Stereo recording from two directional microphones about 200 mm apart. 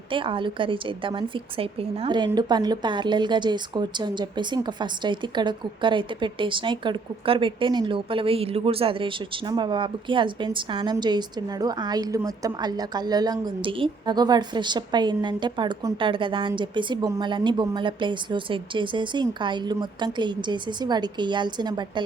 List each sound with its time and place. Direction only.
0.1 s a woman's voice: 25° right (ahead or behind)